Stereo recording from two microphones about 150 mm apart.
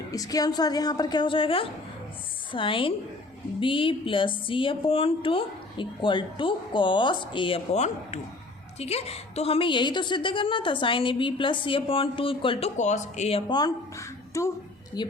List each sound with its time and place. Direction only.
0.1 s a woman's voice: 25° left (ahead or behind); by 13.4 s 45° left (ahead or behind)
13.5 s a woman's voice: 25° left (ahead or behind)